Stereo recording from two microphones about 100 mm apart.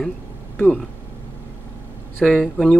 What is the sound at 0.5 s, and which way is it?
Speech, 10° left (ahead or behind).